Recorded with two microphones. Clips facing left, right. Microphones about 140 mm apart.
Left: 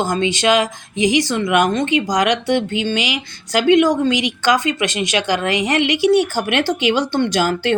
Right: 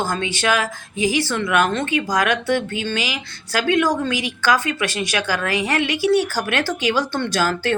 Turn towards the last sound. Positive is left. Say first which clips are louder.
# left 3 dB
turn(degrees=20)  # may be behind; listen again after turning